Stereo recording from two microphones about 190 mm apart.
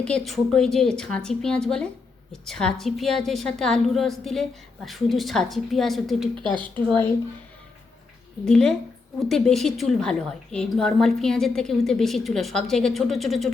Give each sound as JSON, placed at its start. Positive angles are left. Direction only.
{"t": 0.0, "sound": "a woman's voice", "side_deg": 5}
{"t": 6.3, "sound": "a woman's voice", "side_deg": -25}
{"t": 8.4, "sound": "a woman's voice", "side_deg": 5}